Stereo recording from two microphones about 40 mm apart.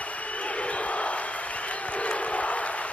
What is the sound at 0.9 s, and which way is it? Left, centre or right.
Crowd, left.